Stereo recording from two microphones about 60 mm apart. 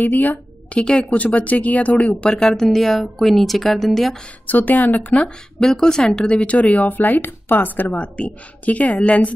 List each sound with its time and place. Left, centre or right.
0.0 s speech: left
2.3 s speech: centre
4.5 s speech: left
5.6 s speech: centre
6.3 s speech: left